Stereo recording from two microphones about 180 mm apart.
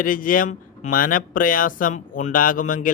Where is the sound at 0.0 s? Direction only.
50° left (ahead or behind).